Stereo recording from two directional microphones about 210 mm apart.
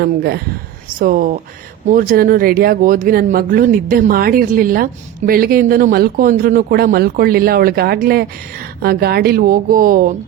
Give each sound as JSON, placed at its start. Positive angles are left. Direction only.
{"t": 0.0, "sound": "speech", "side_deg": -50}